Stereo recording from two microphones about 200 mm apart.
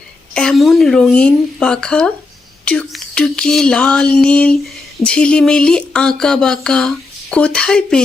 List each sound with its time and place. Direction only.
0.3 s speech: centre (ahead or behind)